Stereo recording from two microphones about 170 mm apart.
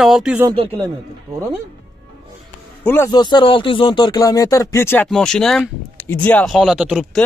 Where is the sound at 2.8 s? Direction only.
10° left (ahead or behind).